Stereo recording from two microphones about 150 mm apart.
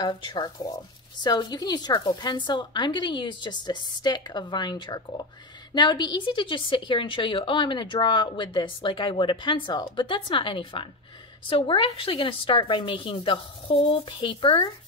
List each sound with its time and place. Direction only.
0.0 s a woman's voice: 30° left (ahead or behind)